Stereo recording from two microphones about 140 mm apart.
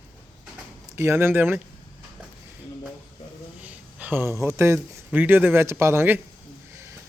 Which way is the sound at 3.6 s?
10° right (ahead or behind).